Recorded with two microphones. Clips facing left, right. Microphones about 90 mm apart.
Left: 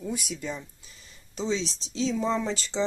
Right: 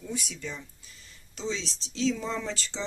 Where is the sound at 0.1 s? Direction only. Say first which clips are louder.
Left 1 dB; 15° left (ahead or behind).